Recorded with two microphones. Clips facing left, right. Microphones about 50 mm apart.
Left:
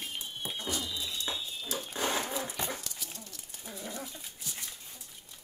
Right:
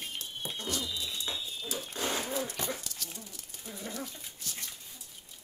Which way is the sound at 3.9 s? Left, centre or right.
Centre.